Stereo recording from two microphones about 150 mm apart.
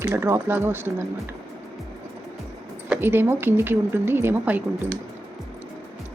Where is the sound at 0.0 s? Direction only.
15° right (ahead or behind).